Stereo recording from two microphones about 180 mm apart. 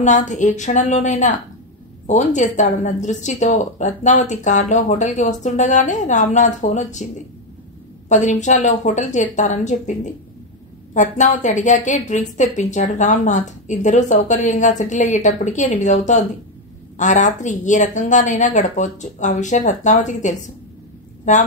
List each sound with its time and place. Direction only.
0.0 s a woman's voice: 40° left (ahead or behind)
8.1 s a woman's voice: 40° left (ahead or behind)